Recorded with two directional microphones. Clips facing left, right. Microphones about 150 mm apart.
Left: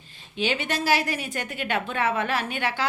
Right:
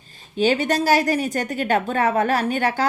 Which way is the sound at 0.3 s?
40° right (ahead or behind).